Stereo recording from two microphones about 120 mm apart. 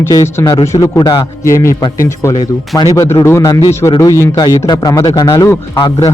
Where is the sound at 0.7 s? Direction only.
25° left (ahead or behind).